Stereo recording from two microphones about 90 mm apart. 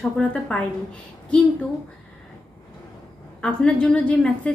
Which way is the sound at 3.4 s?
10° left (ahead or behind).